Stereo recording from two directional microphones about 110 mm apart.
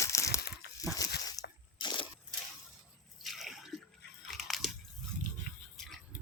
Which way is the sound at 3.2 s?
Centre (ahead or behind).